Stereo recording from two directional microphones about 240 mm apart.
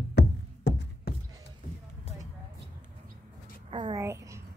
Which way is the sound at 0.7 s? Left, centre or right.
Left.